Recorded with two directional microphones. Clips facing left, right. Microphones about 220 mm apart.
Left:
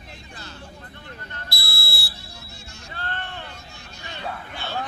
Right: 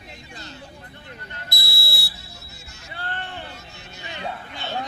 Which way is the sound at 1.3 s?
20° right (ahead or behind).